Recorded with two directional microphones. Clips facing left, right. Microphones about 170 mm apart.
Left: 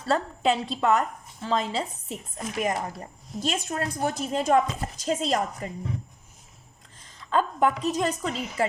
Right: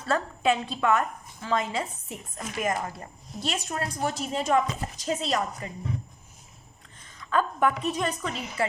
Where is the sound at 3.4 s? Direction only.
45° left (ahead or behind).